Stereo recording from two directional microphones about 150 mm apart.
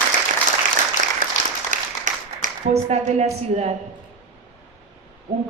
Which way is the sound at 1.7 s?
55° right (ahead or behind).